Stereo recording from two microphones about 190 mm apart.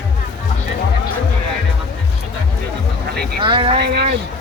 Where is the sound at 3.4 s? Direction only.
25° right (ahead or behind).